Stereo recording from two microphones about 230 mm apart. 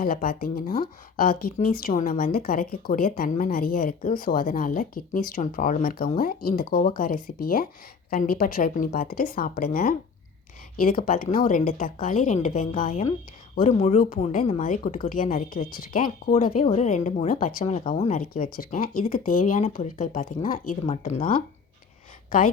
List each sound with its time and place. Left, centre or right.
0.0 s speech: left